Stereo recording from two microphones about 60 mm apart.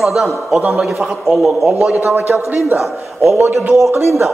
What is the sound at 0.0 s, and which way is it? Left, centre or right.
A man's voice, centre.